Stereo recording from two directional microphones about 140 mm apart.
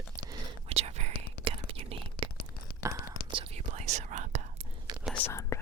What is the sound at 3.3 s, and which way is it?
Whispering, 40° right (ahead or behind).